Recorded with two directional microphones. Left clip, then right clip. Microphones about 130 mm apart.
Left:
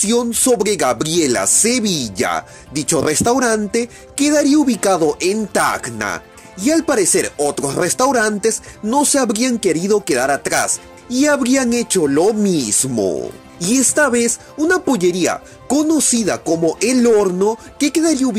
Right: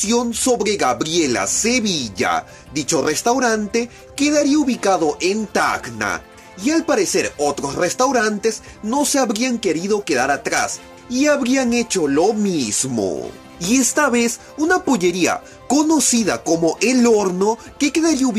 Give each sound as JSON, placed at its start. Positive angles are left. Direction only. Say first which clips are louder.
{"t": 0.0, "sound": "speech", "louder": "left 2 dB", "side_deg": 60}